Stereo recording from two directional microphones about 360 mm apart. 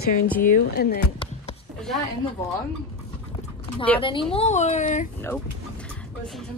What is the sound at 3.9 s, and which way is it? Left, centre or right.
Speech, centre.